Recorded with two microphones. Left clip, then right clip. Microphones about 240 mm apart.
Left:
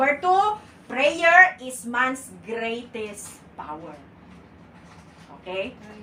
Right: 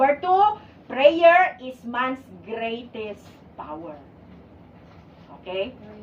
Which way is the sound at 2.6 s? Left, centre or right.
Left.